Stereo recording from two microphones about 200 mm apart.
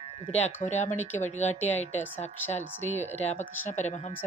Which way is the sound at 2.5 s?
35° left (ahead or behind).